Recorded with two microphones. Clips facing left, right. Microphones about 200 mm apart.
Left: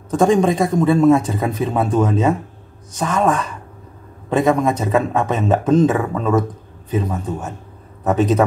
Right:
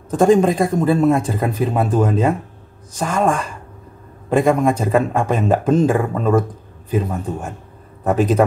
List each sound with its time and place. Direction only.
0.1 s a man's voice: 5° right (ahead or behind)